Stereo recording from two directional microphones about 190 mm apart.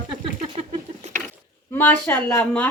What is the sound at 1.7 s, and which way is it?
Speech, 10° left (ahead or behind).